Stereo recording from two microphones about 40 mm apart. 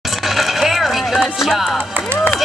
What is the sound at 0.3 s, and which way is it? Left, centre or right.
Coin, centre.